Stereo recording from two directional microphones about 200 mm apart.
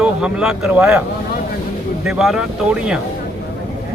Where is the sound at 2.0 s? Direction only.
Centre (ahead or behind).